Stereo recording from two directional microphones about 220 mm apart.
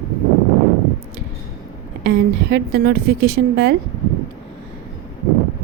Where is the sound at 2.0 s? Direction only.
50° right (ahead or behind).